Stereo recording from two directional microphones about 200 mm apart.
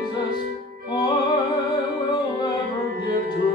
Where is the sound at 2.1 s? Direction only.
25° left (ahead or behind).